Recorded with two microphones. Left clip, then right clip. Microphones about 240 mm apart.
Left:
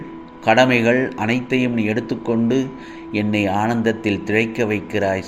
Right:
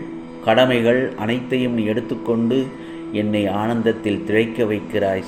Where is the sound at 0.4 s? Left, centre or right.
Left.